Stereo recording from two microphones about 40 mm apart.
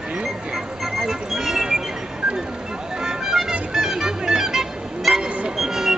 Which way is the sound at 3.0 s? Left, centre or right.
Centre.